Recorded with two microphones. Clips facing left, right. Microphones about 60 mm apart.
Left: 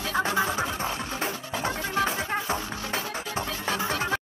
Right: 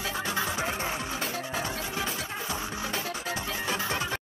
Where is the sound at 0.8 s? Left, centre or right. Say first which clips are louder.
Left 1 dB; centre.